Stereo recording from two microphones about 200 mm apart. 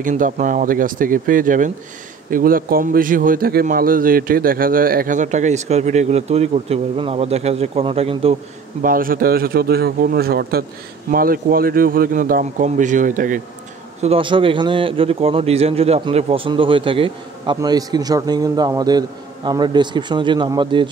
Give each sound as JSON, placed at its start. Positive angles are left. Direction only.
{"t": 0.0, "sound": "a man's voice", "side_deg": -40}
{"t": 8.8, "sound": "a man's voice", "side_deg": -45}
{"t": 14.0, "sound": "a man's voice", "side_deg": -25}